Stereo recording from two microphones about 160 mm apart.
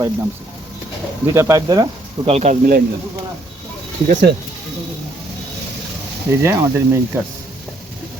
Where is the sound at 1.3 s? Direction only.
20° right (ahead or behind).